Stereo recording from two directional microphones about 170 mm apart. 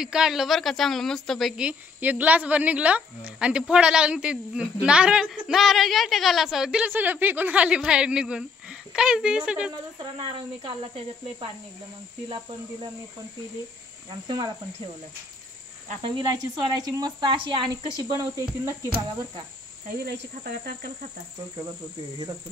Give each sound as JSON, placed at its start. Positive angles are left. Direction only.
{"t": 0.0, "sound": "speech", "side_deg": -5}
{"t": 9.9, "sound": "speech", "side_deg": -30}
{"t": 14.2, "sound": "speech", "side_deg": -25}
{"t": 16.0, "sound": "speech", "side_deg": -25}